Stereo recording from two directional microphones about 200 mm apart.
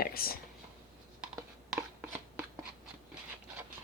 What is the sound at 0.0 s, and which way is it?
Speech, 50° left (ahead or behind).